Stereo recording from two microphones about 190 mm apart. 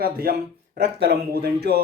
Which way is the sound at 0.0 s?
55° right (ahead or behind).